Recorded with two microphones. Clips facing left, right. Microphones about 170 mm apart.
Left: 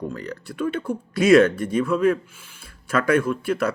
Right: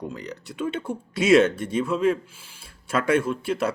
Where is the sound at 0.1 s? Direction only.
20° right (ahead or behind).